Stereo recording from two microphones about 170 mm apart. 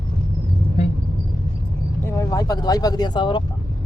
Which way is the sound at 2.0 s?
20° left (ahead or behind).